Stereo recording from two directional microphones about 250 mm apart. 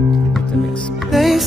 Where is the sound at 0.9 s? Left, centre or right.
Centre.